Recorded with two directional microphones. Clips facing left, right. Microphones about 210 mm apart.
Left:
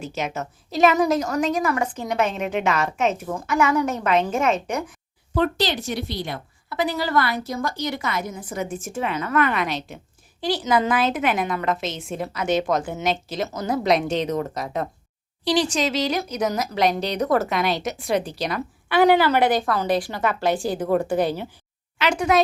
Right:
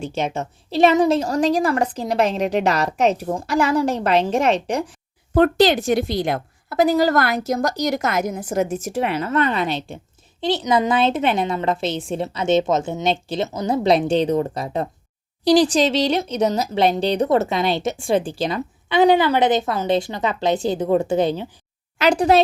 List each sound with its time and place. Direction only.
0.0 s a woman's voice: 30° right (ahead or behind)
5.3 s speech: 50° right (ahead or behind)
6.1 s speech: 90° right
6.7 s speech: 45° right (ahead or behind)
9.1 s a woman's voice: 30° right (ahead or behind)
21.9 s a woman's voice: 35° right (ahead or behind)